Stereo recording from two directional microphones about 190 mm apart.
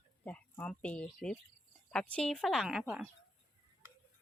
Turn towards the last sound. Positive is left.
turn(degrees=-5)  # may be behind; listen again after turning